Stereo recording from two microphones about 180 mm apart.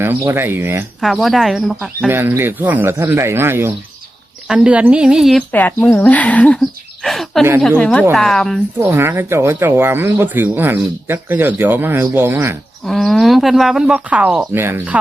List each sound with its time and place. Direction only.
0.3 s speech: 10° right (ahead or behind)
1.0 s speech: centre (ahead or behind)
2.1 s speech: 10° right (ahead or behind)
5.5 s speech: 10° left (ahead or behind)
8.8 s speech: 15° right (ahead or behind)
12.8 s speech: centre (ahead or behind)